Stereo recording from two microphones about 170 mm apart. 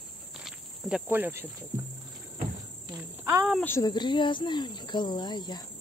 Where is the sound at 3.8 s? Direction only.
25° left (ahead or behind).